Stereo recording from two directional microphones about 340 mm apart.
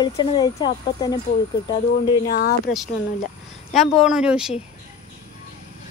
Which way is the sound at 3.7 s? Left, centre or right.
Centre.